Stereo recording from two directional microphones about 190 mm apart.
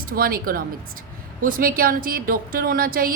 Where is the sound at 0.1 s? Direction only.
50° right (ahead or behind).